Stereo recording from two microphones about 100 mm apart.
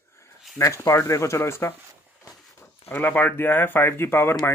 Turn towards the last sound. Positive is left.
turn(degrees=25)  # may be behind; listen again after turning